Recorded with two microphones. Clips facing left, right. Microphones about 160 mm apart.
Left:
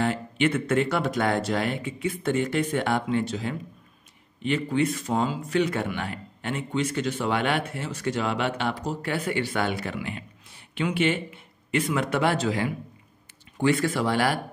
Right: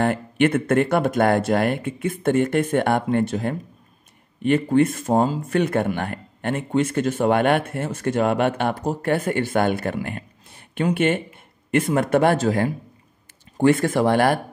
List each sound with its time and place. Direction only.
0.0 s speech: 55° right (ahead or behind)